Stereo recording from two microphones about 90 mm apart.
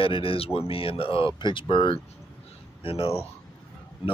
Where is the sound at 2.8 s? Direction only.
90° left.